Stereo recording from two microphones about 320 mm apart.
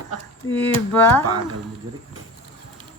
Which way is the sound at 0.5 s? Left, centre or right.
Centre.